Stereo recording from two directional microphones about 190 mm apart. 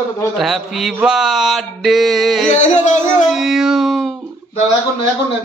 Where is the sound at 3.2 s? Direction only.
Centre (ahead or behind).